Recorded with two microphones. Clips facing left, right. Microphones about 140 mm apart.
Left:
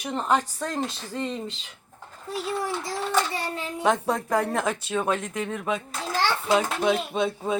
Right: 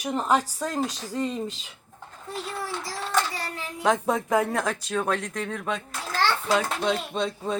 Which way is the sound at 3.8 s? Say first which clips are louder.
Right 1 dB; centre (ahead or behind).